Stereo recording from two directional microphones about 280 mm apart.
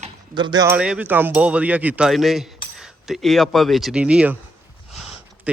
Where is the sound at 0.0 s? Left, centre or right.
Centre.